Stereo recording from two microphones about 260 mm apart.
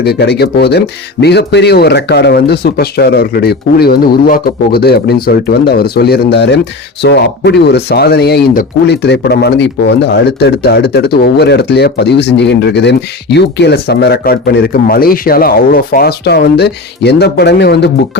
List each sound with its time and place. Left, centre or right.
0.0 s speech: left